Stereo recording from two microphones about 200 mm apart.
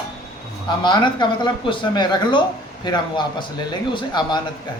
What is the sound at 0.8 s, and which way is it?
Speech, 25° left (ahead or behind).